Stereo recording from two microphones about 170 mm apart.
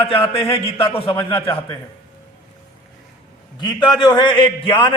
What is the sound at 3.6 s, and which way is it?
A man's voice, 25° left (ahead or behind).